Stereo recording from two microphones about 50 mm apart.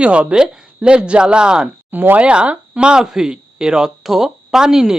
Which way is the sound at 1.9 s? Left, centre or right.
Right.